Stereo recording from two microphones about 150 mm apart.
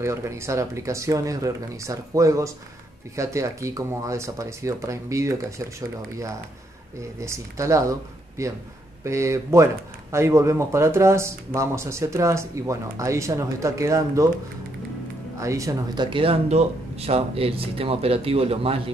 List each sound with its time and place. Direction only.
0.0 s speech: 20° right (ahead or behind)
15.3 s speech: 20° right (ahead or behind); by 18.8 s 40° right (ahead or behind)